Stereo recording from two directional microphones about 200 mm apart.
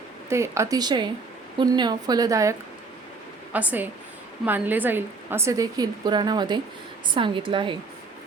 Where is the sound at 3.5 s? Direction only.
10° right (ahead or behind).